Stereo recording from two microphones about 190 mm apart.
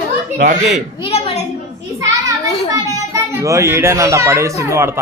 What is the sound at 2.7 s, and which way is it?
A child's voice, 15° right (ahead or behind).